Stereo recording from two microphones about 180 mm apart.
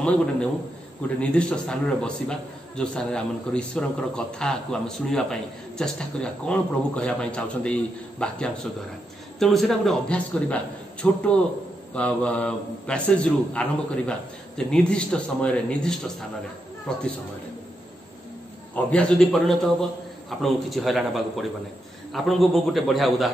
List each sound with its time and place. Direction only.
1.0 s a man's voice: 5° left (ahead or behind)
18.9 s a man's voice: 5° left (ahead or behind)